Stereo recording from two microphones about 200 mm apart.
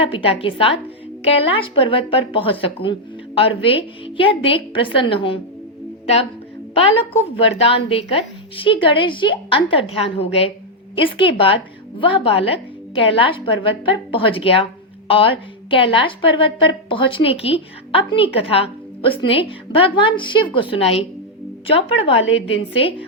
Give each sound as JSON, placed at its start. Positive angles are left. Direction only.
{"t": 0.0, "sound": "a woman's voice", "side_deg": 30}
{"t": 6.7, "sound": "a woman's voice", "side_deg": 30}